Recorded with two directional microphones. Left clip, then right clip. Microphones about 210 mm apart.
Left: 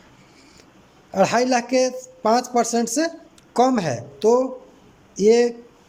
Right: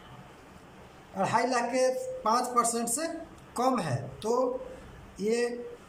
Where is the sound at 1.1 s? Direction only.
50° left (ahead or behind).